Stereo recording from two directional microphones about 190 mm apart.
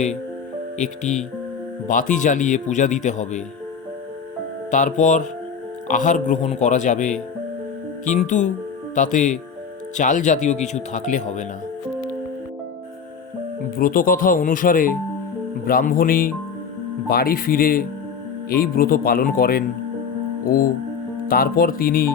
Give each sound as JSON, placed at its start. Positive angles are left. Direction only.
{"t": 0.8, "sound": "a man's voice", "side_deg": 40}
{"t": 4.7, "sound": "a man's voice", "side_deg": 40}
{"t": 13.7, "sound": "speech", "side_deg": 45}
{"t": 21.2, "sound": "speech", "side_deg": 50}